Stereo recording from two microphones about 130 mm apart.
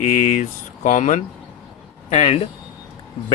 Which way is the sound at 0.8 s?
75° left (ahead or behind).